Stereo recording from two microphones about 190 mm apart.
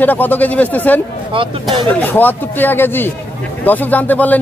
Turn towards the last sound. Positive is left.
turn(degrees=10)  # may be behind; listen again after turning